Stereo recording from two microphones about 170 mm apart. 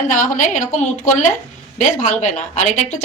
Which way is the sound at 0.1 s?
50° left (ahead or behind).